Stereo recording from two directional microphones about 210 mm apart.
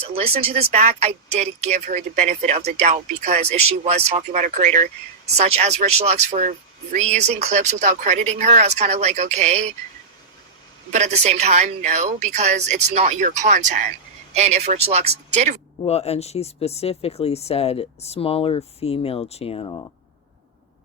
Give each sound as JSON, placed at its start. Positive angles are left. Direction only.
{"t": 0.0, "sound": "speech", "side_deg": -30}
{"t": 10.9, "sound": "speech", "side_deg": -35}
{"t": 15.8, "sound": "speech", "side_deg": 30}